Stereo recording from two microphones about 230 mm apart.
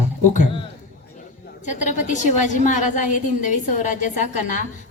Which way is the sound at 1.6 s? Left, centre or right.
Left.